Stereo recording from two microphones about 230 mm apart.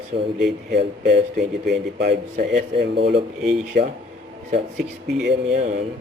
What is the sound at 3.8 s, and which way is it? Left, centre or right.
Speech, right.